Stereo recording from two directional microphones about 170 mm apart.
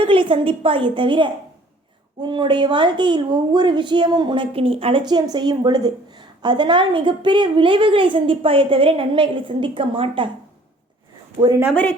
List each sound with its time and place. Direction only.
0.0 s a woman's voice: 30° right (ahead or behind)
11.4 s speech: 50° right (ahead or behind)
11.7 s speech: 5° left (ahead or behind)